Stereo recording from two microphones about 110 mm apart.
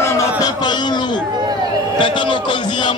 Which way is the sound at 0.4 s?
40° left (ahead or behind).